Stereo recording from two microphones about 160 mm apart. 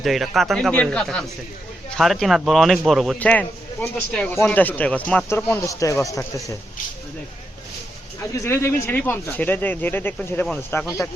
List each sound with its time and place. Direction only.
0.0 s speech: centre (ahead or behind); by 6.6 s 20° left (ahead or behind)
8.2 s speech: 15° left (ahead or behind)